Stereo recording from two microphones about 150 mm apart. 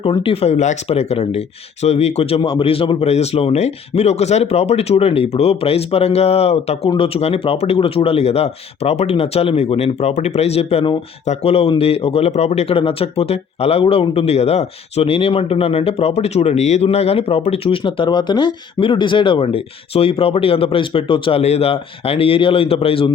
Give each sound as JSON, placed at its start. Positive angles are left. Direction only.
{"t": 0.0, "sound": "speech", "side_deg": 35}